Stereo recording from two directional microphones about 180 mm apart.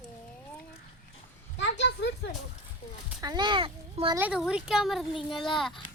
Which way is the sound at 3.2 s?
20° right (ahead or behind).